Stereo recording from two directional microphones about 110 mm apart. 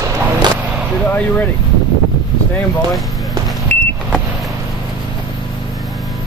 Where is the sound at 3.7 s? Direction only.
10° left (ahead or behind).